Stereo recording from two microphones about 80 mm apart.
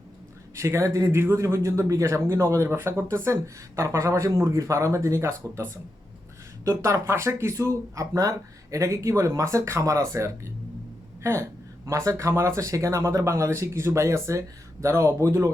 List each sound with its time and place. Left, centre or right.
0.5 s speech: right
2.6 s speech: right